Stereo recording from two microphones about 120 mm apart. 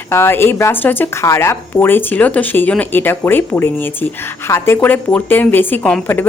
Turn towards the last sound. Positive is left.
turn(degrees=10)  # may be behind; listen again after turning